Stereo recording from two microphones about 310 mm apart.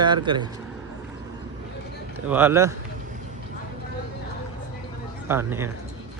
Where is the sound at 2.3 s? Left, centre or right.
Centre.